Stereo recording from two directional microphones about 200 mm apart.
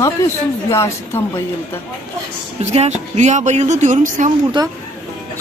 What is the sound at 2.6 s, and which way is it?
Speech, 35° right (ahead or behind).